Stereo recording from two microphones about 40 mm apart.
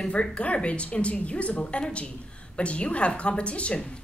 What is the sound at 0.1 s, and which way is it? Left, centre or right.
A woman's voice, left.